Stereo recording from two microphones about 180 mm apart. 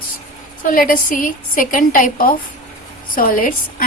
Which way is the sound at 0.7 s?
50° left (ahead or behind).